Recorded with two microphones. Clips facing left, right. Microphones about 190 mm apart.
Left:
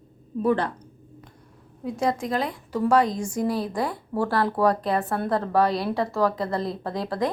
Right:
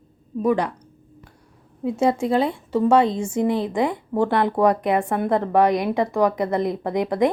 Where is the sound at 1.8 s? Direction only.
25° right (ahead or behind).